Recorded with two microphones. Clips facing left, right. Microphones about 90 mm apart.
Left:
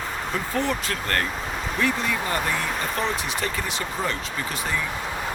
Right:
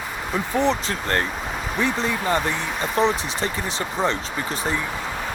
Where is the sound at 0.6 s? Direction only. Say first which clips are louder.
Right 6 dB; 25° right (ahead or behind).